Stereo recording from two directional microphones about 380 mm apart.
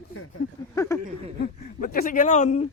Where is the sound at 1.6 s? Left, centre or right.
Left.